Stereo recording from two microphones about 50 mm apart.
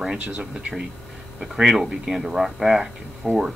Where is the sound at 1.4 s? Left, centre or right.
Centre.